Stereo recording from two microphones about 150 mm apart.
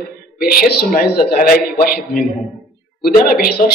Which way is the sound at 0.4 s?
80° left.